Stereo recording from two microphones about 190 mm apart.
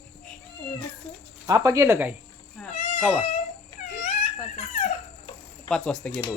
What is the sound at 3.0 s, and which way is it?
Speech, centre (ahead or behind).